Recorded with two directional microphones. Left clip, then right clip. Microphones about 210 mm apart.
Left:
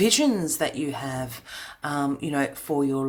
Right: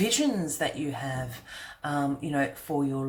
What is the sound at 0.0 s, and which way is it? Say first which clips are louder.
Speech: left 5 dB; 40° left (ahead or behind).